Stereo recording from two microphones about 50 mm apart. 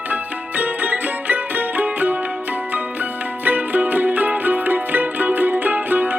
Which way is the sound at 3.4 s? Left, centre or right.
Right.